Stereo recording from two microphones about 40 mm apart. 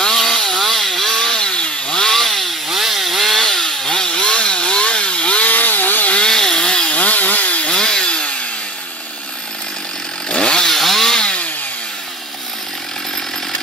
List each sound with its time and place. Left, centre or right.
0.0 s chainsaw: centre
1.4 s chainsaw: left
6.1 s chainsaw: centre
6.9 s wood: left
7.6 s chainsaw: centre
10.3 s chainsaw: left
10.7 s chainsaw: centre